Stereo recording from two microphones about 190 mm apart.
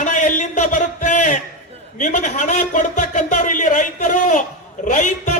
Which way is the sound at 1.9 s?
40° left (ahead or behind).